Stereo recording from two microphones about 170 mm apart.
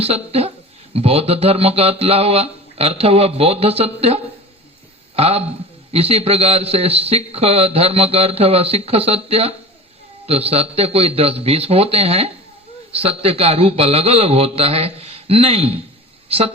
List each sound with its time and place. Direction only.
0.0 s a man's voice: 35° right (ahead or behind)